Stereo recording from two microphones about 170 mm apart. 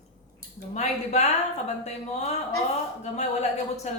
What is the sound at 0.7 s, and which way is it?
Speech, 40° left (ahead or behind).